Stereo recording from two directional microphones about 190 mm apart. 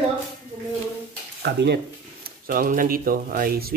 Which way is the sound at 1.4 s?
60° right (ahead or behind).